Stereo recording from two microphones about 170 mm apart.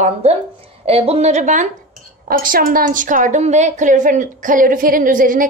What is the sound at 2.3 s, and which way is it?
A woman's voice, 60° right (ahead or behind).